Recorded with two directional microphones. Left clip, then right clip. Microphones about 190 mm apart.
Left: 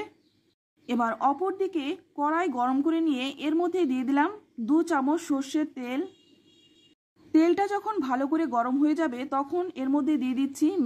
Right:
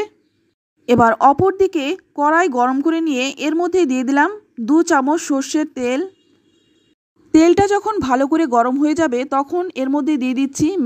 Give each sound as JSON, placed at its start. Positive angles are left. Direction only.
{"t": 0.8, "sound": "speech", "side_deg": -35}
{"t": 7.3, "sound": "speech", "side_deg": -35}